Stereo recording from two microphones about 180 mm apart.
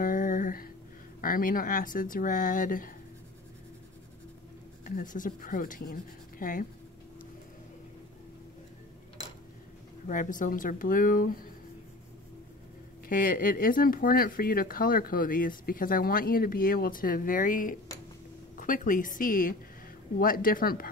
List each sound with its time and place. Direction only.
0.0 s a sound: 50° left (ahead or behind)
1.2 s speech: 50° left (ahead or behind)
4.8 s speech: 50° left (ahead or behind)
10.0 s speech: 45° left (ahead or behind)
13.1 s speech: 50° left (ahead or behind)